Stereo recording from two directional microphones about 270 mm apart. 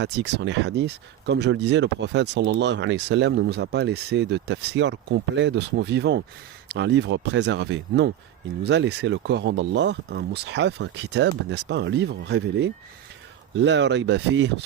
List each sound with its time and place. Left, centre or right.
0.0 s speech: right